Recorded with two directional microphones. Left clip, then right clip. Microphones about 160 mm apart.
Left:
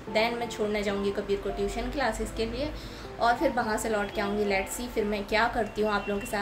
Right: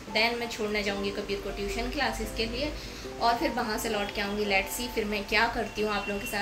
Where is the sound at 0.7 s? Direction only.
15° left (ahead or behind).